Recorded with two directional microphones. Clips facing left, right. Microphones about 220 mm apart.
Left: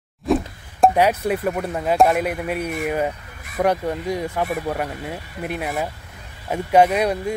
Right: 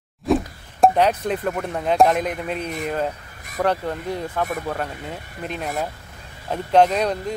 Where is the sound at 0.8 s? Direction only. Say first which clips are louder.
Left 1 dB; 10° left (ahead or behind).